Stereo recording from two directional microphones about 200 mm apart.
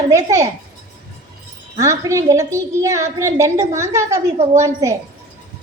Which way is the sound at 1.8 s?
15° right (ahead or behind).